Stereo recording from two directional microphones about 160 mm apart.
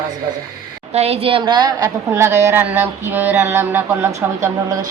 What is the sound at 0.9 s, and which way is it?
Speech, 40° right (ahead or behind).